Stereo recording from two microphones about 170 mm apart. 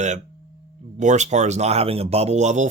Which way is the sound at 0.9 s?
45° right (ahead or behind).